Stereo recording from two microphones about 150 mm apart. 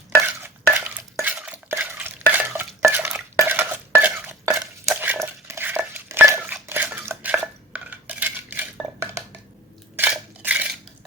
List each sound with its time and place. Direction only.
0.3 s stir: 10° right (ahead or behind)
4.4 s dishes: 15° right (ahead or behind)
9.9 s crushing: 10° right (ahead or behind)